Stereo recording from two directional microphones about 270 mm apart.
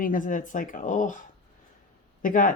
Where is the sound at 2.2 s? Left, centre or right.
Left.